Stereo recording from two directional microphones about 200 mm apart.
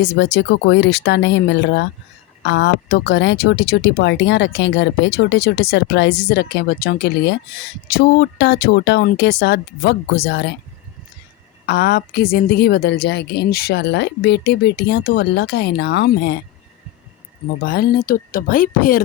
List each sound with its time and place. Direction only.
0.0 s speech: 60° left (ahead or behind)
11.6 s speech: 55° left (ahead or behind)
17.7 s speech: 50° left (ahead or behind)